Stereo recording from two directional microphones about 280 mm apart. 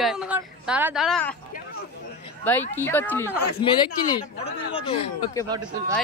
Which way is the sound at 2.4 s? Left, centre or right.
Centre.